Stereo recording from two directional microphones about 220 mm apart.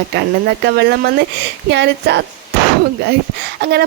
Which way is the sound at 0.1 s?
50° right (ahead or behind).